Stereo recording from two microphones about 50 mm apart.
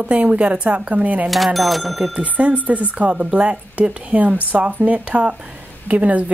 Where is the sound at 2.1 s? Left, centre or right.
Right.